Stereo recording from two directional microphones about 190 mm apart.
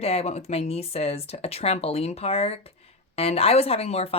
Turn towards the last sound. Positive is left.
turn(degrees=35)  # may be behind; listen again after turning